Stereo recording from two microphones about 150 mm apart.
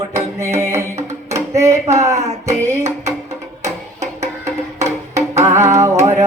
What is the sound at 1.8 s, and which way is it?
Music, 45° right (ahead or behind).